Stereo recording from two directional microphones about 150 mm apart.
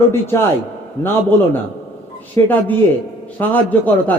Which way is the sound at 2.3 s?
10° left (ahead or behind).